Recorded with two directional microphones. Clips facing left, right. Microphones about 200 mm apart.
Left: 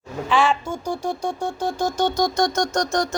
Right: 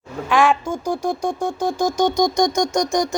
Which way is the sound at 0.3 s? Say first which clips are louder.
Right 3 dB; 10° right (ahead or behind).